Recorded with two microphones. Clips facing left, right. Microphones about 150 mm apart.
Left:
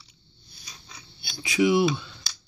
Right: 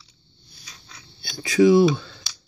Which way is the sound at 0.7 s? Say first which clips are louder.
Even; 10° left (ahead or behind).